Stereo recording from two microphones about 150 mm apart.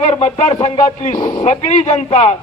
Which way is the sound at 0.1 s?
45° left (ahead or behind).